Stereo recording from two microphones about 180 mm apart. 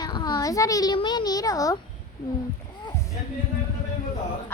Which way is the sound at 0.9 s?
25° left (ahead or behind).